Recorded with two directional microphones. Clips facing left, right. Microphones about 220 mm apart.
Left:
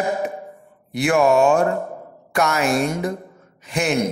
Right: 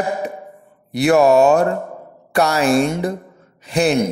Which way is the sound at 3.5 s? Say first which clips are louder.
Right 6 dB; 35° right (ahead or behind).